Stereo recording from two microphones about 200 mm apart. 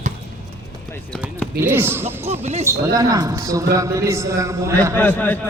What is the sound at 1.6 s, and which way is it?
A man's voice, 10° right (ahead or behind).